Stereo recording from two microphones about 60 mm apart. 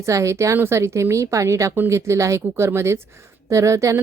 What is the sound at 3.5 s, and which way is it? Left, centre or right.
Speech, right.